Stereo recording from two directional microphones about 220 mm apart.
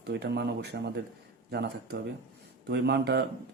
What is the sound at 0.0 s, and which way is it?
Speech, 50° right (ahead or behind).